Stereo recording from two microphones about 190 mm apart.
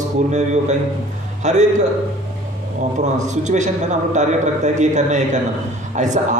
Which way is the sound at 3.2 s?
40° right (ahead or behind).